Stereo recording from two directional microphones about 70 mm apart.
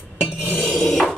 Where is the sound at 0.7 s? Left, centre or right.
Centre.